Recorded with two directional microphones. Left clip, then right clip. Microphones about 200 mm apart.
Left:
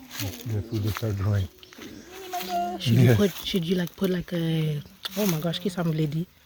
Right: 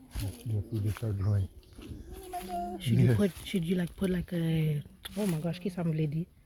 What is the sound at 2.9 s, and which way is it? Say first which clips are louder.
Speech: left 8 dB; 50° left (ahead or behind).